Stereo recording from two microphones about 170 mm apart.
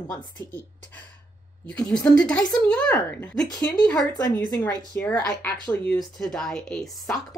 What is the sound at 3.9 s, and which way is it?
Speech, 20° left (ahead or behind).